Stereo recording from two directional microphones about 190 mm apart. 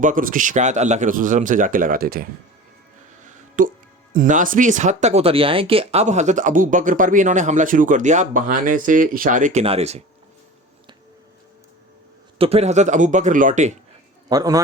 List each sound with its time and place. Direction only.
0.0 s speech: 45° right (ahead or behind)
3.2 s music: 45° right (ahead or behind)
4.1 s speech: 45° right (ahead or behind)
12.4 s speech: 35° right (ahead or behind)
14.3 s speech: 20° right (ahead or behind)